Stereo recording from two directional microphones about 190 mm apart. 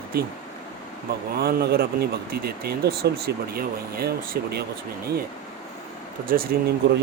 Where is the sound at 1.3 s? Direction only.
55° right (ahead or behind).